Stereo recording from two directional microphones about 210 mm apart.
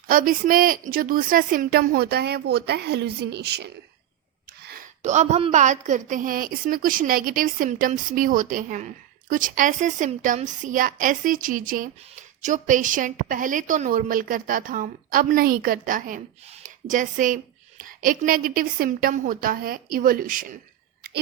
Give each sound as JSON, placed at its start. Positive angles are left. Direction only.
{"t": 0.1, "sound": "a woman's voice", "side_deg": -40}
{"t": 4.6, "sound": "a sound", "side_deg": -45}
{"t": 5.0, "sound": "a woman's voice", "side_deg": -35}